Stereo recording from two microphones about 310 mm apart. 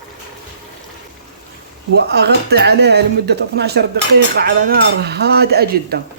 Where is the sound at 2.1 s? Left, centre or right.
Right.